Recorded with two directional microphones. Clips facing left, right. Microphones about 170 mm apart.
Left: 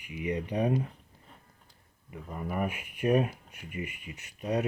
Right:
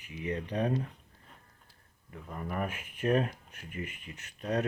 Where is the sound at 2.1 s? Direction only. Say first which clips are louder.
Left 2 dB; 10° left (ahead or behind).